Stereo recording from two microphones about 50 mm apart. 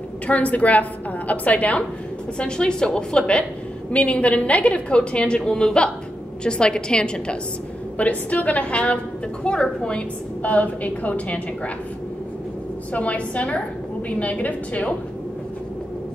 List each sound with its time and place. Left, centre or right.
0.3 s a woman's voice: left
2.3 s a woman's voice: centre
8.0 s a woman's voice: left
10.4 s a woman's voice: left
12.9 s a woman's voice: left